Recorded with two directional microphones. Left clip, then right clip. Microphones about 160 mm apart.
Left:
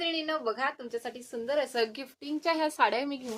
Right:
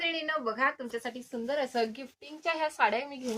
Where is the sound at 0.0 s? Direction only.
25° left (ahead or behind).